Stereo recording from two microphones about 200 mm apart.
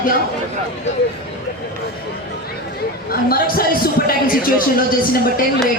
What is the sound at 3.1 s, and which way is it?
A man's voice, 50° left (ahead or behind).